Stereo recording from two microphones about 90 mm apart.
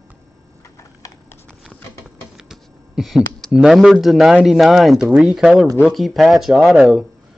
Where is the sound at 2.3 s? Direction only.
5° right (ahead or behind).